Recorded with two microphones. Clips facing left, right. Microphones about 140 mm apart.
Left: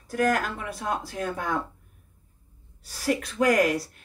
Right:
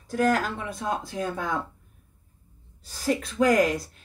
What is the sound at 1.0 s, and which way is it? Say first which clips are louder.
Speech: even; 25° right (ahead or behind).